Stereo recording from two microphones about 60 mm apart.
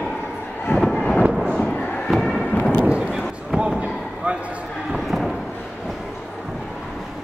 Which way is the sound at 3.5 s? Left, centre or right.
Centre.